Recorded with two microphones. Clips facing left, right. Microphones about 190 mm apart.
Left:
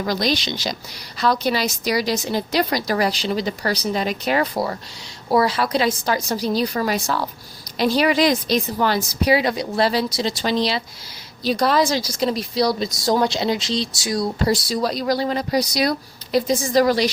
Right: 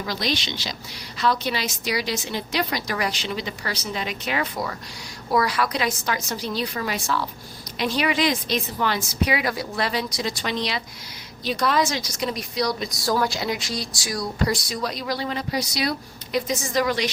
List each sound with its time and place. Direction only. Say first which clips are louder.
0.1 s a woman's voice: left 5 dB; 40° left (ahead or behind)